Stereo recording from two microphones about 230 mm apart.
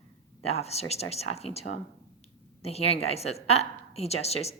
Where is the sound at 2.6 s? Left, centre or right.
Left.